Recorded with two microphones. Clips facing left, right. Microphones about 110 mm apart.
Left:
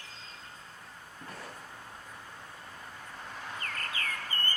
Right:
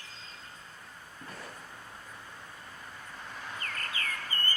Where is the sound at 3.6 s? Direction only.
50° left (ahead or behind).